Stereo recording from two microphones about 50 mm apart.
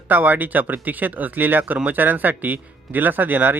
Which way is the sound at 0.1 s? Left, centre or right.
Right.